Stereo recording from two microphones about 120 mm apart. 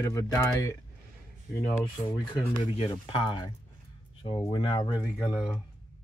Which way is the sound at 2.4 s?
55° left (ahead or behind).